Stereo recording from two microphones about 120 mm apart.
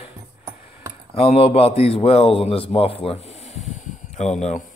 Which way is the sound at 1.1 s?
55° left (ahead or behind).